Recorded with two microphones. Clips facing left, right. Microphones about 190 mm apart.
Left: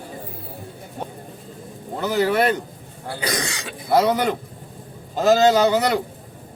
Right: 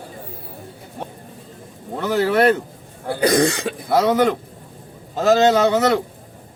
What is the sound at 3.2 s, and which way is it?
Speech, 55° right (ahead or behind).